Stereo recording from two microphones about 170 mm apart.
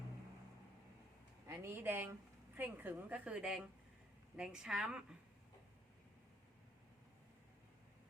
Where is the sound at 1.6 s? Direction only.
15° right (ahead or behind).